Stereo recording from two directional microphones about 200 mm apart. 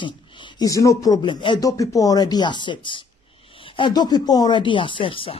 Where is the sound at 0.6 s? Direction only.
15° left (ahead or behind).